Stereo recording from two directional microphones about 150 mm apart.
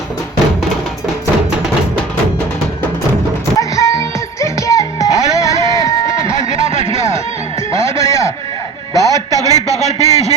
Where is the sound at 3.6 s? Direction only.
20° left (ahead or behind).